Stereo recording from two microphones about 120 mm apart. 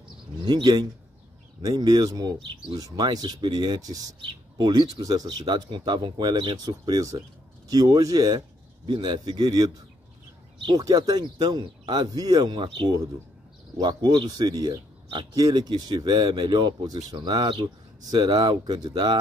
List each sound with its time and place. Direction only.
0.5 s speech: 35° right (ahead or behind)